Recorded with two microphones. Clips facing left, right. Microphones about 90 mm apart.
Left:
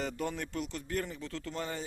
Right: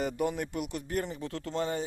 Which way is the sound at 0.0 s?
15° right (ahead or behind).